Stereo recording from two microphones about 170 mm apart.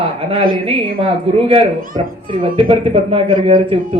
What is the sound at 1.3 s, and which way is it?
A child's voice, 35° right (ahead or behind).